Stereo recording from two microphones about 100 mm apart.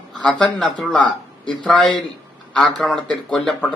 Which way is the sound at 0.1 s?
5° left (ahead or behind).